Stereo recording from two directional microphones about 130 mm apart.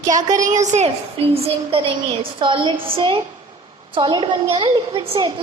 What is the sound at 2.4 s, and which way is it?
A child's voice, 40° right (ahead or behind).